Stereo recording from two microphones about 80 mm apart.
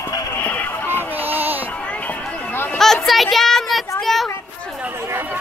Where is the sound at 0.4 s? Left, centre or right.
Centre.